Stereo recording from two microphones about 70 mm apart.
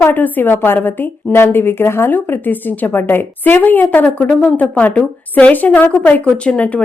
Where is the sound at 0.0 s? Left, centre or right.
Left.